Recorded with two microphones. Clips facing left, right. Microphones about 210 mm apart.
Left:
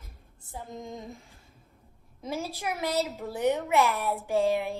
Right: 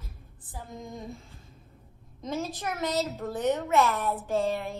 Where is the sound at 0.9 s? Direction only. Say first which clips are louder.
Even; 20° left (ahead or behind).